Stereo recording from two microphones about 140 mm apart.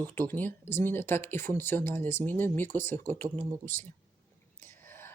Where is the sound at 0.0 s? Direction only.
15° left (ahead or behind).